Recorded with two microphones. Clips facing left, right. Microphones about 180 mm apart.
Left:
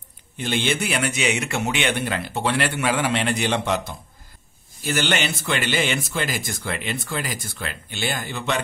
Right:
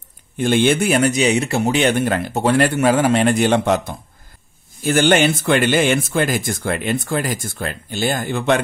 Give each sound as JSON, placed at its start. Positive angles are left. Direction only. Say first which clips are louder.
{"t": 0.4, "sound": "speech", "louder": "right 8 dB", "side_deg": -50}